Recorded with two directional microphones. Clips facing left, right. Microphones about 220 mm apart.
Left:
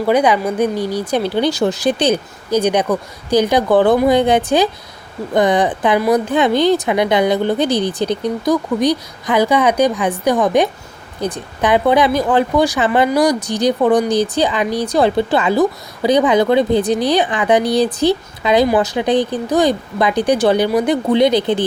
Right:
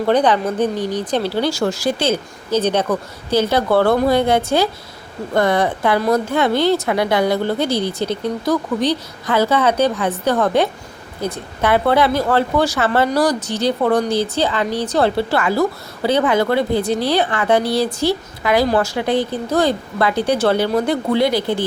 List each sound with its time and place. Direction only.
0.0 s a woman's voice: 10° left (ahead or behind)